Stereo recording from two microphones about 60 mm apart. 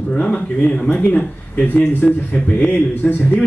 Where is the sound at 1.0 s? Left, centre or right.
Left.